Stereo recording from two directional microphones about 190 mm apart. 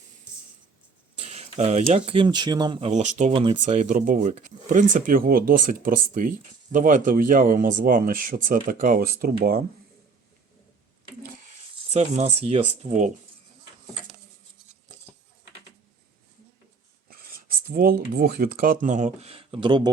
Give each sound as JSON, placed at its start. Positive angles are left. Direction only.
{"t": 1.1, "sound": "speech", "side_deg": -35}
{"t": 3.3, "sound": "speech", "side_deg": -25}
{"t": 11.9, "sound": "speech", "side_deg": -35}
{"t": 17.1, "sound": "speech", "side_deg": -50}